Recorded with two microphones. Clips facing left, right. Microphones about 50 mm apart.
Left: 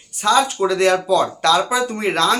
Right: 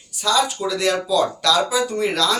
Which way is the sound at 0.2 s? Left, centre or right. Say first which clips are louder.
Left 4 dB; left.